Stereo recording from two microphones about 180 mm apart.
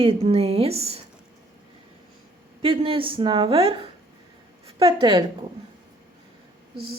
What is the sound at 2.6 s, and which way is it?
A woman's voice, 30° right (ahead or behind).